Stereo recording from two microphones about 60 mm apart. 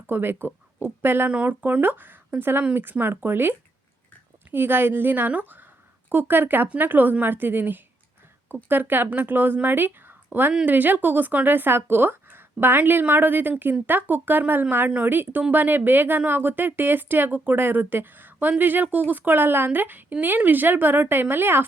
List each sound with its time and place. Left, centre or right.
0.1 s speech: right
4.5 s speech: right